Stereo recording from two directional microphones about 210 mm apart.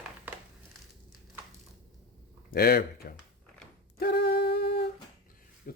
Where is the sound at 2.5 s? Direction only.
45° left (ahead or behind).